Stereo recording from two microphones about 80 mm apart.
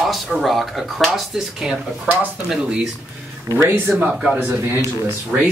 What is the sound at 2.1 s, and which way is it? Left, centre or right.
Speech, centre.